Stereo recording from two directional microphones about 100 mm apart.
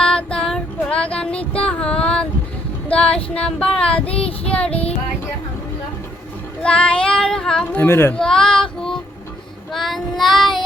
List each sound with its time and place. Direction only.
0.0 s child singing: 10° left (ahead or behind)
2.9 s music: 10° left (ahead or behind)
3.2 s female singing: 10° left (ahead or behind)
4.4 s child singing: 10° left (ahead or behind)
4.7 s a sound: 80° left
6.6 s child singing: 10° left (ahead or behind)
7.8 s a child's voice: 20° left (ahead or behind)
8.1 s child singing: 5° left (ahead or behind)